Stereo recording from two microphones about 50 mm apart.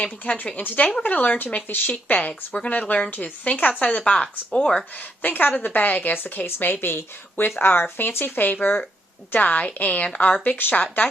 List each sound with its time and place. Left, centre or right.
0.4 s a woman's voice: left
3.9 s speech: left
5.2 s a woman's voice: left